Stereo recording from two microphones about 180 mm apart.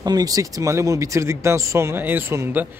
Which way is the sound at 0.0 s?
20° right (ahead or behind).